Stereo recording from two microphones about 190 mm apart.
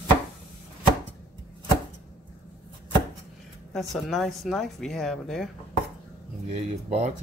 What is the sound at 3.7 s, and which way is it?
Speech, centre (ahead or behind).